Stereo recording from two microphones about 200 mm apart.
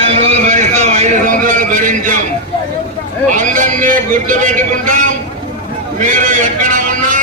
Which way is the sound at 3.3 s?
40° right (ahead or behind).